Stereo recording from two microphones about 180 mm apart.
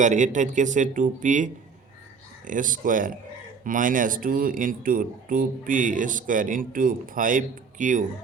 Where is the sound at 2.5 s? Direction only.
50° right (ahead or behind).